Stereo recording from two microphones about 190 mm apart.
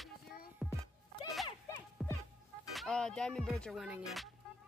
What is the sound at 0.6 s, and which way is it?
Music, centre (ahead or behind).